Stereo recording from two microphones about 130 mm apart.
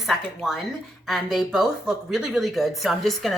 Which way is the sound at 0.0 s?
Centre (ahead or behind).